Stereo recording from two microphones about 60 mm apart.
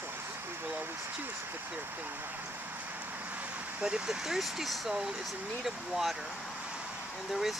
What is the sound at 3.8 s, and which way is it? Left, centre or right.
Speech, centre.